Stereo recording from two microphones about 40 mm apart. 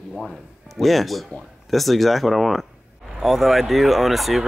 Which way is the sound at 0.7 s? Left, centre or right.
Centre.